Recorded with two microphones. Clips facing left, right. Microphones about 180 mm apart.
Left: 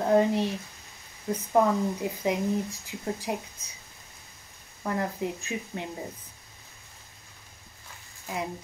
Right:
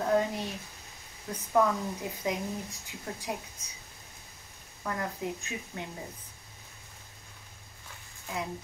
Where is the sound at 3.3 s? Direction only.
25° left (ahead or behind).